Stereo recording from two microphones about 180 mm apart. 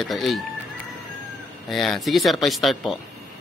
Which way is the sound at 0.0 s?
Centre (ahead or behind).